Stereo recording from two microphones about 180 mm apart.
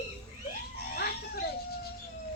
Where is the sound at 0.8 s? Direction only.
60° left (ahead or behind).